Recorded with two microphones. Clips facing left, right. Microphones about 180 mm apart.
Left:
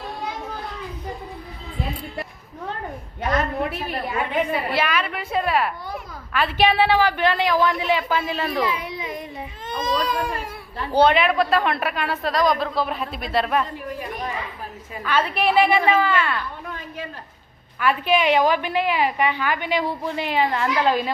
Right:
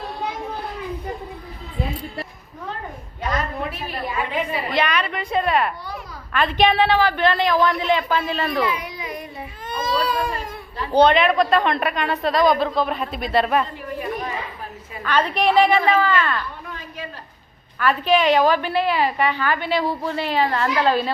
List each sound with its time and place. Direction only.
4.1 s a woman's voice: 50° left (ahead or behind)
4.7 s a woman's voice: 5° left (ahead or behind)
8.6 s baby cry: 25° left (ahead or behind)
10.2 s a woman's voice: 10° left (ahead or behind)
15.0 s a woman's voice: 5° left (ahead or behind)
17.7 s a woman's voice: 10° left (ahead or behind)